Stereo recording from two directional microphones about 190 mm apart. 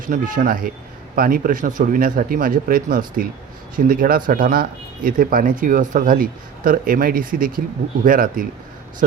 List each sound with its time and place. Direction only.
0.0 s speech: 45° right (ahead or behind)